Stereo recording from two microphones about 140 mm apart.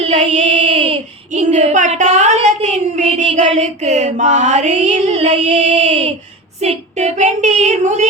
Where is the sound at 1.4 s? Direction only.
55° right (ahead or behind).